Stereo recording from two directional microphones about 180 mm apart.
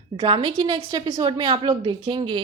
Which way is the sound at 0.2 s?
25° right (ahead or behind).